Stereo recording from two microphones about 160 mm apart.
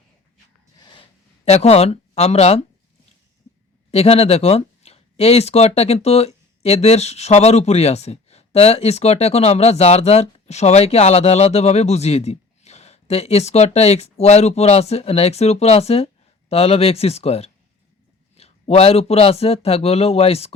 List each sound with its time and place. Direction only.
0.8 s a sound: 30° left (ahead or behind)
1.5 s speech: 40° left (ahead or behind)
3.9 s speech: 40° left (ahead or behind)